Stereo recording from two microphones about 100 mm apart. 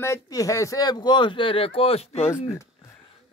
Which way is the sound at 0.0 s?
30° left (ahead or behind).